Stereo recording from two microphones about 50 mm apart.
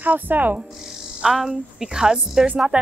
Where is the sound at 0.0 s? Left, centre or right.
Right.